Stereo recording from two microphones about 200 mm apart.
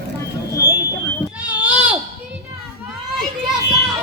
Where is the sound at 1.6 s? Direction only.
5° right (ahead or behind).